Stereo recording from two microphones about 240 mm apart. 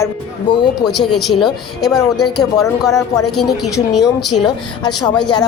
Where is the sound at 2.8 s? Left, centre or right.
Centre.